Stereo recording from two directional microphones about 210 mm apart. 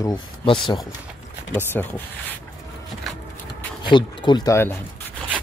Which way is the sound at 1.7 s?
10° left (ahead or behind).